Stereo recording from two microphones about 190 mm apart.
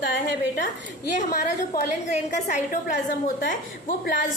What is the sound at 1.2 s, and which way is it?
A woman's voice, 50° left (ahead or behind).